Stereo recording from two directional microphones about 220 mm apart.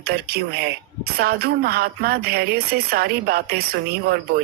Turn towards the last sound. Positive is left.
turn(degrees=-45)  # may be behind; listen again after turning